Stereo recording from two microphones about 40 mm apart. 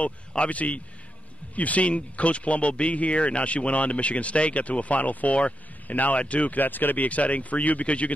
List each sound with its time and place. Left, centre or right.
0.5 s speech: left
7.1 s speech: left